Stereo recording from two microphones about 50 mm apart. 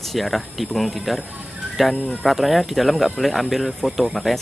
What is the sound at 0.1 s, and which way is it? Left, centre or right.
Speech, centre.